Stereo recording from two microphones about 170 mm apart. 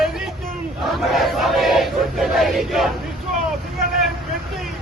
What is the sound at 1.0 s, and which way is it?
Battle cry, centre (ahead or behind).